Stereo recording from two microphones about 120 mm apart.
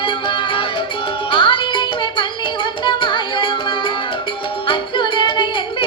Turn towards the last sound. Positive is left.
turn(degrees=40)  # may be behind; listen again after turning